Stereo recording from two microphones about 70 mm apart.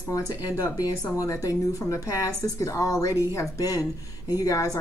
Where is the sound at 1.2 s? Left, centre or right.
Left.